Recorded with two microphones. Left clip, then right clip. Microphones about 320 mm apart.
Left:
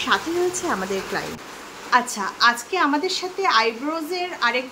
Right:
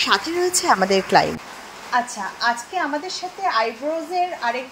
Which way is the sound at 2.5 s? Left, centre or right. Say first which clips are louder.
Left 2 dB; centre.